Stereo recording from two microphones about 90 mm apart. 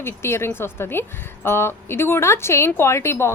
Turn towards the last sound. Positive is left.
turn(degrees=30)  # may be behind; listen again after turning